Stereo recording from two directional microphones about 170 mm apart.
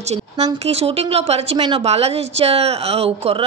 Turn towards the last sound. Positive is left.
turn(degrees=-35)  # may be behind; listen again after turning